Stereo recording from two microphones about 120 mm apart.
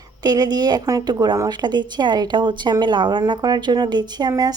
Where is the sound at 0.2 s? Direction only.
35° right (ahead or behind).